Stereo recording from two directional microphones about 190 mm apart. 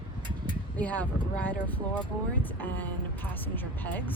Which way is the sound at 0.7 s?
10° left (ahead or behind).